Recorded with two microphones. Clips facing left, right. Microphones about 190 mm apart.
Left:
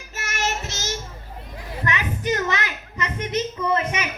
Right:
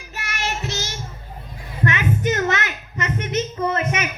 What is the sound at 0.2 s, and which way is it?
Child singing, 45° left (ahead or behind).